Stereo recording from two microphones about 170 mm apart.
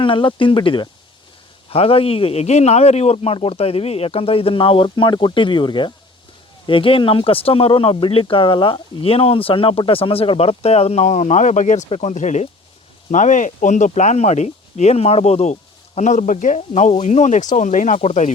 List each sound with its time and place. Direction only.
0.0 s speech: 30° left (ahead or behind)